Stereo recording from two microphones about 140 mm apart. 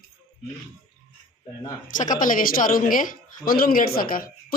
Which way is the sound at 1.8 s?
65° left (ahead or behind).